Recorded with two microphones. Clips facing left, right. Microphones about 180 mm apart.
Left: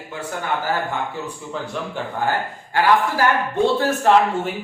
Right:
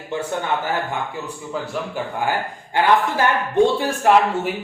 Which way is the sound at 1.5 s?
5° right (ahead or behind).